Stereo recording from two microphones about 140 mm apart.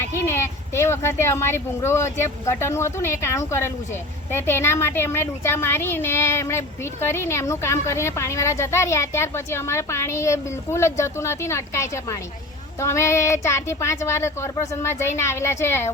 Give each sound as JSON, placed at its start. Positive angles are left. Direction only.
{"t": 0.0, "sound": "a woman's voice", "side_deg": 20}